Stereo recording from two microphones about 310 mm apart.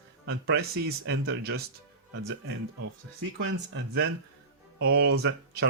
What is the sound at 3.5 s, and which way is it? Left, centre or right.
Speech, right.